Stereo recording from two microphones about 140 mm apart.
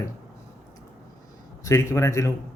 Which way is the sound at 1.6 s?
20° left (ahead or behind).